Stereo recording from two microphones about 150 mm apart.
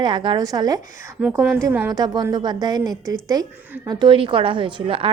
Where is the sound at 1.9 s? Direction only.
30° right (ahead or behind).